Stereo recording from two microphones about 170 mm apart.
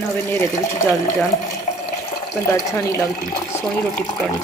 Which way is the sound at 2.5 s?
15° left (ahead or behind).